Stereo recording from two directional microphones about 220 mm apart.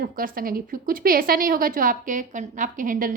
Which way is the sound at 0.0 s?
40° right (ahead or behind).